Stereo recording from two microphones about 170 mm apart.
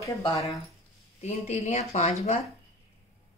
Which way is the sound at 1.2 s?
40° left (ahead or behind).